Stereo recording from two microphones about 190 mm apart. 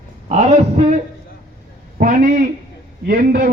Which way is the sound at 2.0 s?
45° right (ahead or behind).